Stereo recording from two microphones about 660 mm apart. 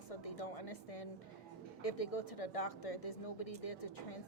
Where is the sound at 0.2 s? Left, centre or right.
Left.